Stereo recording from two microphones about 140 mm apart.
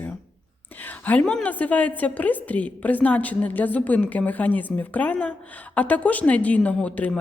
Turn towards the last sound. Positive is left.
turn(degrees=10)  # may be behind; listen again after turning